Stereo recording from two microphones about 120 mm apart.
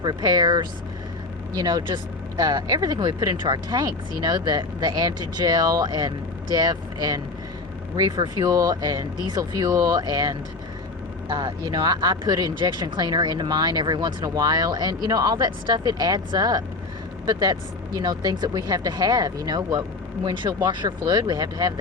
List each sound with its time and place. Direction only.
0.0 s speech: 35° right (ahead or behind)